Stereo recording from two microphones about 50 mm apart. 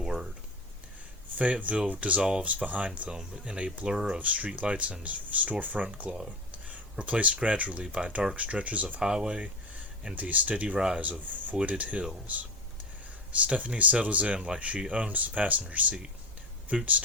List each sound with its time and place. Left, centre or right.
0.0 s a sound: centre
1.4 s speech: right
3.1 s speech: centre
3.9 s speech: centre
4.2 s speech: right
9.0 s speech: centre
10.2 s speech: right
10.8 s speech: centre
11.0 s speech: right
13.3 s speech: right